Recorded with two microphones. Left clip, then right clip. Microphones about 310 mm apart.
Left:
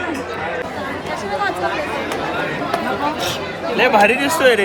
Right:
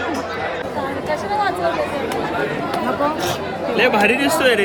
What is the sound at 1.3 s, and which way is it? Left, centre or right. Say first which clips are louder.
Speech: even; right.